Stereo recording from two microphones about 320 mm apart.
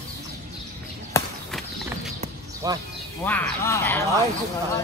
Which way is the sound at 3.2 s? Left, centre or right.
Centre.